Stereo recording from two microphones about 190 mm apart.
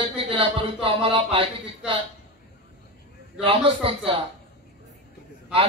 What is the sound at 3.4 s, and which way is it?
Speech, 30° right (ahead or behind).